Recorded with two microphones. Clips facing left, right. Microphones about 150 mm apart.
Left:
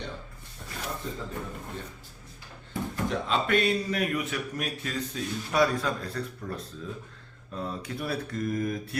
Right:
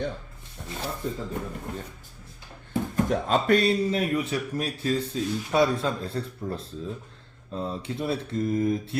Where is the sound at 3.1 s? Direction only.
45° right (ahead or behind).